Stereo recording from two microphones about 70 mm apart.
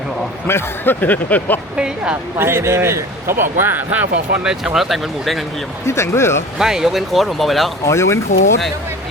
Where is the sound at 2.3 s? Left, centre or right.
Right.